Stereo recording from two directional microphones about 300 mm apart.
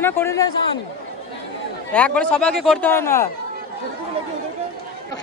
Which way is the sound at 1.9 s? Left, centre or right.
Centre.